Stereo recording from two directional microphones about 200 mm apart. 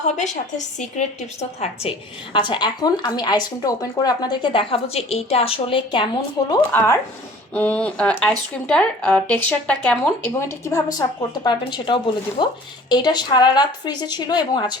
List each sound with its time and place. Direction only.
0.0 s a woman's voice: 35° left (ahead or behind)
6.5 s a woman's voice: 15° left (ahead or behind)